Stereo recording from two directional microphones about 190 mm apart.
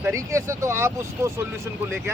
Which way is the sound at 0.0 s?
15° right (ahead or behind).